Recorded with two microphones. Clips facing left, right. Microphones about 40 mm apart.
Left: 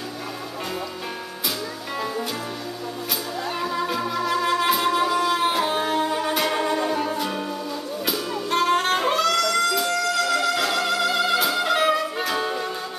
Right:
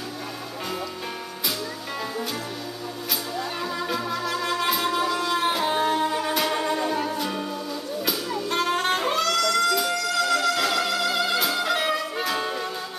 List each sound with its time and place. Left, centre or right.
3.6 s music: centre